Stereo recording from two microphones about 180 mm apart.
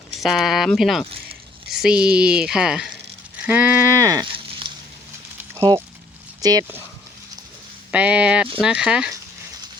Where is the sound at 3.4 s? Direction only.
10° right (ahead or behind); by 4.7 s 25° right (ahead or behind).